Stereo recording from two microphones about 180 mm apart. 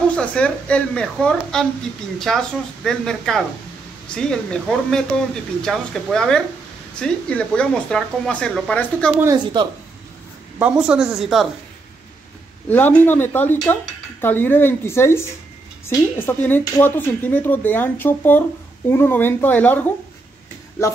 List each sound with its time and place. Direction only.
0.1 s speech: 5° left (ahead or behind)
9.2 s speech: 20° right (ahead or behind)
10.6 s speech: 5° right (ahead or behind)
12.6 s speech: 10° left (ahead or behind)